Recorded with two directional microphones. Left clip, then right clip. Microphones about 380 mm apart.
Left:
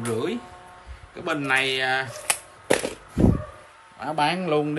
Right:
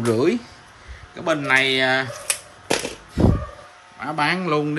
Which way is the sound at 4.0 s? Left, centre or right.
Centre.